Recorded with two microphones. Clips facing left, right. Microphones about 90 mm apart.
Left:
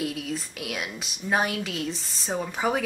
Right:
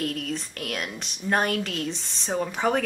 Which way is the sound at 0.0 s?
5° left (ahead or behind).